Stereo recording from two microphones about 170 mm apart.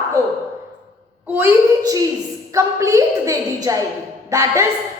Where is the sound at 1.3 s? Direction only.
20° right (ahead or behind).